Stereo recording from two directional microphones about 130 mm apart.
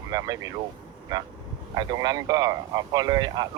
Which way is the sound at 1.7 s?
30° right (ahead or behind).